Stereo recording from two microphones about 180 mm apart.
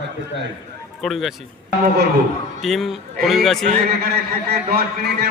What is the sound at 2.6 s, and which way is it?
Speech, centre (ahead or behind).